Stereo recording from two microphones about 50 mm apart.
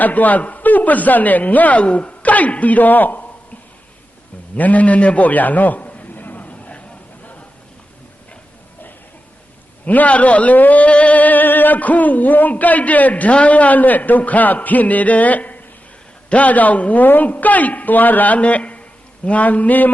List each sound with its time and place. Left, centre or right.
0.0 s speech: left
4.5 s a sound: left
9.8 s a man's voice: left